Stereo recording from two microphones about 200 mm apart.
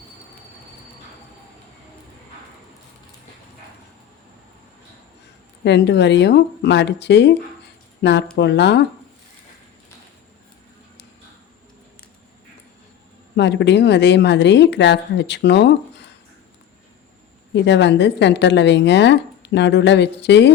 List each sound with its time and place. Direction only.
5.6 s speech: 60° left (ahead or behind)
13.3 s speech: 60° left (ahead or behind)
17.5 s speech: 60° left (ahead or behind)